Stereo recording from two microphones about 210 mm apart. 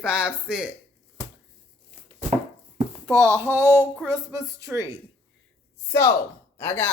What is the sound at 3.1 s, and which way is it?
Speech, 15° right (ahead or behind).